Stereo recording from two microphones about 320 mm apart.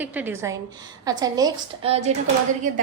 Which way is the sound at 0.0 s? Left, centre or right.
Centre.